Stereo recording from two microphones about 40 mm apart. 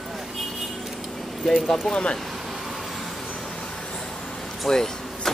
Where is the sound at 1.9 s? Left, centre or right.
Centre.